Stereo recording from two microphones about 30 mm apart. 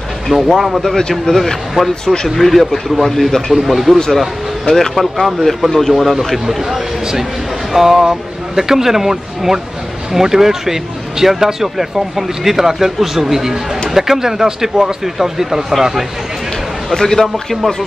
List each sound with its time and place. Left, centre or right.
0.3 s speech: centre
1.2 s a man's voice: centre
3.3 s speech: centre
3.6 s a man's voice: centre
4.6 s speech: centre
5.2 s a man's voice: centre
6.1 s speech: centre
8.0 s speech: right
16.9 s speech: centre